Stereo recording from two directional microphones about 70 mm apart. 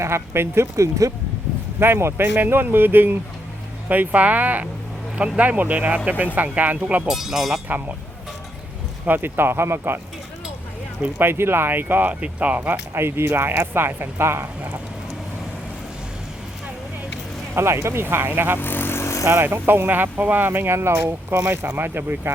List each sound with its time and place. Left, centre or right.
0.0 s speech: right
1.8 s speech: right; by 7.1 s centre
7.1 s speech: centre
9.0 s speech: right
11.2 s speech: right
17.5 s speech: right
18.6 s vehicle: left
19.2 s speech: right
19.5 s speech: right